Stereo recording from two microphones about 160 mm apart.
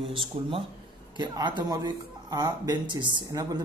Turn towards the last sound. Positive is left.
turn(degrees=-25)  # may be behind; listen again after turning